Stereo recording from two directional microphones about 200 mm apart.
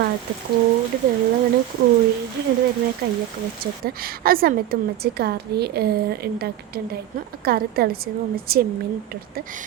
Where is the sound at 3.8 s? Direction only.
50° right (ahead or behind).